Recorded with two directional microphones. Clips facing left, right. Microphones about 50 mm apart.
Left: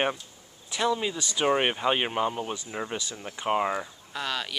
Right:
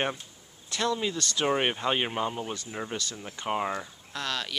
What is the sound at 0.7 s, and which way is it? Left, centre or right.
Speech, centre.